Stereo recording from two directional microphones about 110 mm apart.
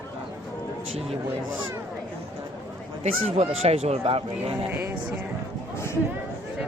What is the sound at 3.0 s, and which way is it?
Speech, 70° right (ahead or behind).